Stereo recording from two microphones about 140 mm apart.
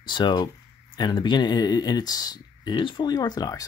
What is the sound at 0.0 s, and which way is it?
Speech, 35° left (ahead or behind).